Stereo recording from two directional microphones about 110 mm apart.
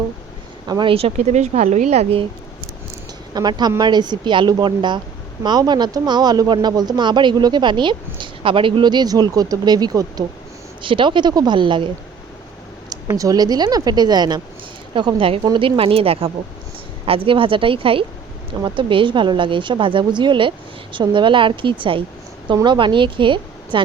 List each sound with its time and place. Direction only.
0.7 s a woman's voice: 45° right (ahead or behind)
0.9 s a woman's voice: 75° right (ahead or behind)
3.3 s a woman's voice: 40° right (ahead or behind)
10.8 s a woman's voice: 50° right (ahead or behind)
13.1 s speech: 30° right (ahead or behind)
14.9 s a woman's voice: 50° right (ahead or behind)